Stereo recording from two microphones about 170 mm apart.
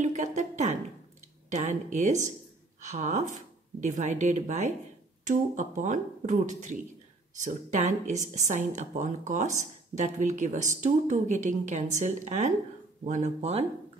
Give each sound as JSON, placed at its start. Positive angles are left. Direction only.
{"t": 0.0, "sound": "speech", "side_deg": -45}